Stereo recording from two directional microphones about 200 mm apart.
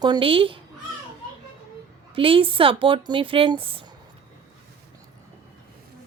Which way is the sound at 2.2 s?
25° right (ahead or behind).